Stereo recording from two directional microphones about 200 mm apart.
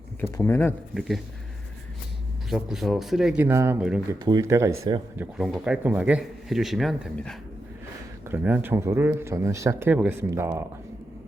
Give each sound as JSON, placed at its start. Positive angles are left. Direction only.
{"t": 0.2, "sound": "speech", "side_deg": 10}
{"t": 0.9, "sound": "speech", "side_deg": 0}
{"t": 2.5, "sound": "speech", "side_deg": 0}
{"t": 4.3, "sound": "speech", "side_deg": -15}
{"t": 8.3, "sound": "speech", "side_deg": -10}